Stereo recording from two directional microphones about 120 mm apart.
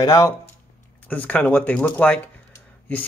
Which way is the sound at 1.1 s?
10° left (ahead or behind).